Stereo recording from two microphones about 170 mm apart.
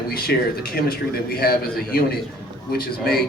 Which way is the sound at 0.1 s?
60° left (ahead or behind).